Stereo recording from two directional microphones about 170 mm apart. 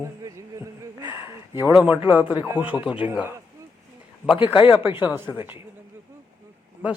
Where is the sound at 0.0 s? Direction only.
20° right (ahead or behind).